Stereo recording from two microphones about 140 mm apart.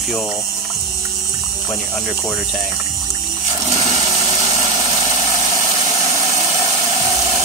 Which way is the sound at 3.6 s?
50° right (ahead or behind).